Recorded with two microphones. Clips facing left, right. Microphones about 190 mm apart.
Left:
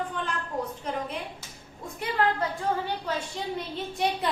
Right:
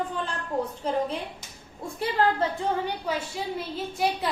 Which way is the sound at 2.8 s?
10° right (ahead or behind).